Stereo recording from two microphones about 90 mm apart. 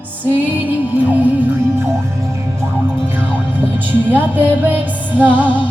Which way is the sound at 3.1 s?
20° right (ahead or behind).